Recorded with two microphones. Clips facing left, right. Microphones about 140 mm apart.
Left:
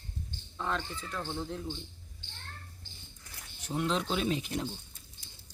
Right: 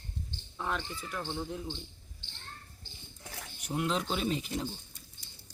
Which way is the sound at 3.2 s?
90° right.